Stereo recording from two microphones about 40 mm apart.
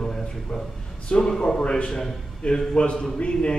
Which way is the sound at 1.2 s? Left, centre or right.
Centre.